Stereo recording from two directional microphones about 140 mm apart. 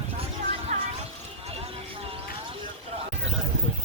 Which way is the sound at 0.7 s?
50° right (ahead or behind).